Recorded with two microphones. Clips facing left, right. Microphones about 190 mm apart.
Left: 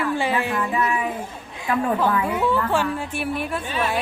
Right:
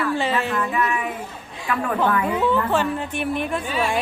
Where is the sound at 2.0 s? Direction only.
10° left (ahead or behind).